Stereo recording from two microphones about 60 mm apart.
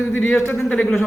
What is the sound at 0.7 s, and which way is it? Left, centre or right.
Speech, left.